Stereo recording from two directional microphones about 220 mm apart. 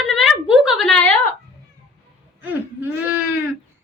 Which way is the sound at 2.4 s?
10° right (ahead or behind).